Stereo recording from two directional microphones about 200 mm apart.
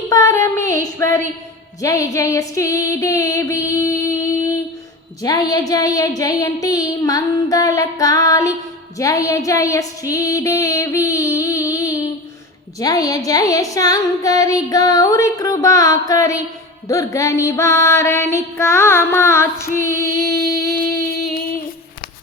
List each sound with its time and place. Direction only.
0.1 s child singing: 15° left (ahead or behind)
1.8 s music: 15° left (ahead or behind)
5.2 s child singing: 20° left (ahead or behind)
21.3 s a sound: 45° left (ahead or behind)